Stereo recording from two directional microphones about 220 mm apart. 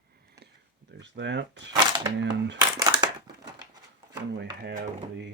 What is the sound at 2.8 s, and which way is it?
Crushing, 20° right (ahead or behind).